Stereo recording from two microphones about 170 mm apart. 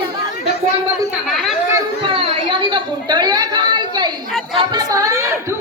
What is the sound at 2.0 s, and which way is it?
Chatter, 30° right (ahead or behind).